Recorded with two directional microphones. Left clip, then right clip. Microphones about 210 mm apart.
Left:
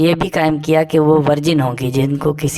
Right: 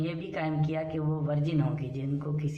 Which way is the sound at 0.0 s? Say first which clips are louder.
Left 19 dB; 45° left (ahead or behind).